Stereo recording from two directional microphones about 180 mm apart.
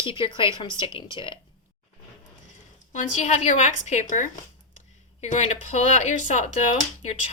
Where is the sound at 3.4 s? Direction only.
40° left (ahead or behind).